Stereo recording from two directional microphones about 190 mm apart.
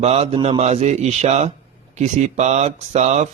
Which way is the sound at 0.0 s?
35° right (ahead or behind).